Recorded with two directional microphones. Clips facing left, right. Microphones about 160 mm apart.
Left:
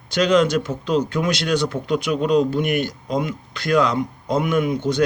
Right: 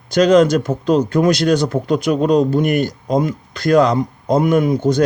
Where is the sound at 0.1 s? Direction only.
40° right (ahead or behind).